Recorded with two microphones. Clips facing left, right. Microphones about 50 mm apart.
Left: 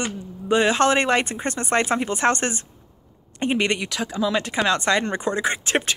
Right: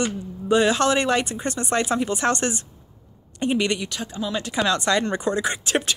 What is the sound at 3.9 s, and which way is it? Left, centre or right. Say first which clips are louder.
Speech: left 5 dB; left.